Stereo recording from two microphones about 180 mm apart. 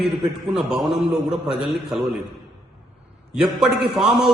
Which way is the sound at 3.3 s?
5° right (ahead or behind).